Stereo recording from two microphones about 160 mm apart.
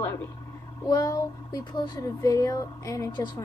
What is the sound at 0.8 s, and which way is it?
Speech, 25° left (ahead or behind).